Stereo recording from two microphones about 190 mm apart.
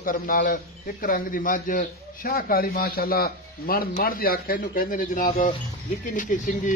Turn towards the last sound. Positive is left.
turn(degrees=45)  # may be behind; listen again after turning